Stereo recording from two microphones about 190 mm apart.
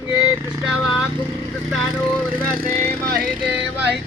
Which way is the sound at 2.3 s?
50° right (ahead or behind).